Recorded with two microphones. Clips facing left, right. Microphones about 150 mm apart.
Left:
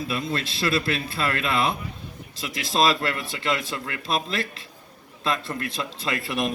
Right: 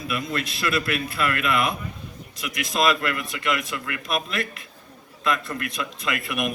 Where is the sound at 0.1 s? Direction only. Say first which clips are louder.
Even; 30° left (ahead or behind).